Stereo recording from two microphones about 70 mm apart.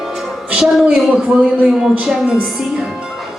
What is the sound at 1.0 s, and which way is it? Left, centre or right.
A woman's voice, centre.